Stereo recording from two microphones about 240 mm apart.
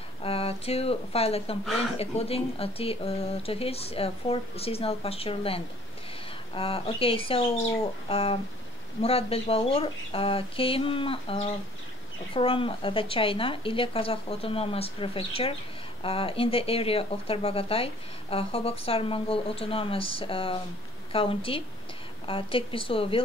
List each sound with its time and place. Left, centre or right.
0.2 s speech: left